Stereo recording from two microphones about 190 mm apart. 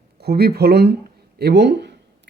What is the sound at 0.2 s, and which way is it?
Speech, 55° right (ahead or behind).